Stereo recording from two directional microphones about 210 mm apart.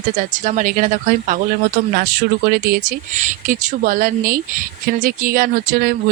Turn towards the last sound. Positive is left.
turn(degrees=-45)  # may be behind; listen again after turning